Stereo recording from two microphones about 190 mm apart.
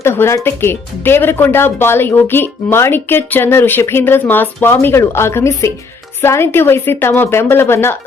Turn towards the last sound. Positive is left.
turn(degrees=10)  # may be behind; listen again after turning